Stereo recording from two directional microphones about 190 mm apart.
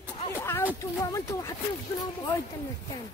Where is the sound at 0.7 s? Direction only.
15° left (ahead or behind).